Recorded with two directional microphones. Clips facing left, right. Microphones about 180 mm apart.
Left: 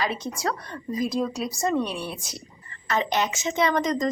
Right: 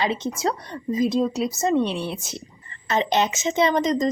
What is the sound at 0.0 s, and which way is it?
A woman's voice, 25° right (ahead or behind).